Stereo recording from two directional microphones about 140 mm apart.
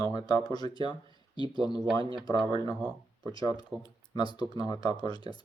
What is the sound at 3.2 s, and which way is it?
Speech, 30° left (ahead or behind).